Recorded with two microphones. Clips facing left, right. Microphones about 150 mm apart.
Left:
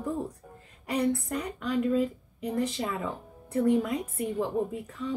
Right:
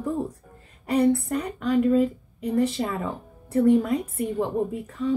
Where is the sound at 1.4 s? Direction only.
60° right (ahead or behind).